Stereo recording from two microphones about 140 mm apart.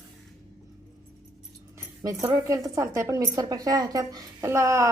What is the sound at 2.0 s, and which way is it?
A woman's voice, 25° right (ahead or behind).